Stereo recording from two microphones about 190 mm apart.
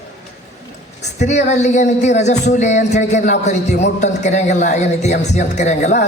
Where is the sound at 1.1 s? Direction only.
35° left (ahead or behind).